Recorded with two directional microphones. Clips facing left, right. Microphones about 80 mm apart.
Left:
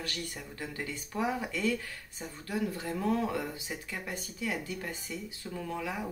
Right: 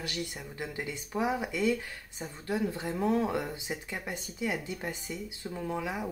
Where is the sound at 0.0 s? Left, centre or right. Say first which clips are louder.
Right 2 dB; centre.